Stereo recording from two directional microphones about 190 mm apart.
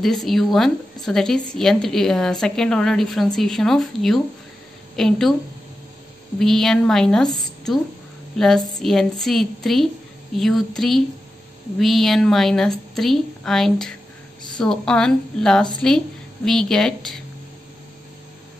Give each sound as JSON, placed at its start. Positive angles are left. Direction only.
{"t": 0.0, "sound": "a woman's voice", "side_deg": 0}
{"t": 6.4, "sound": "a woman's voice", "side_deg": 0}
{"t": 7.3, "sound": "a sound", "side_deg": 0}
{"t": 8.4, "sound": "a woman's voice", "side_deg": 0}